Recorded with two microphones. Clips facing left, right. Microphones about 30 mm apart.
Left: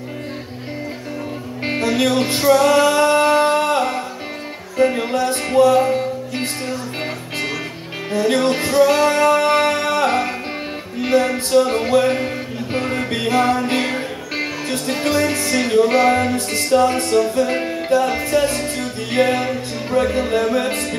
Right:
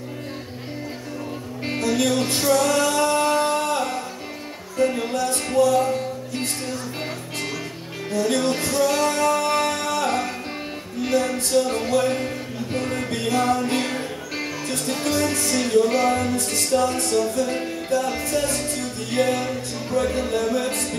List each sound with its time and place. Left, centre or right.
1.6 s music: left
8.1 s music: left